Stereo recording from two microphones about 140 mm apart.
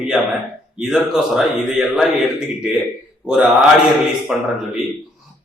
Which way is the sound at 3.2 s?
5° right (ahead or behind).